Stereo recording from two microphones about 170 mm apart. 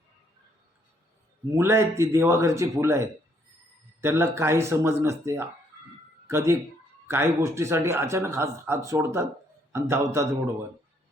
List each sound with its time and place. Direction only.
1.5 s speech: 15° right (ahead or behind)